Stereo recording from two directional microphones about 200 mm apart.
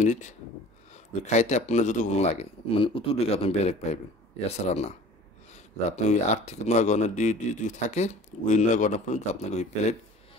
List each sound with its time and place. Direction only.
0.9 s speech: 35° left (ahead or behind)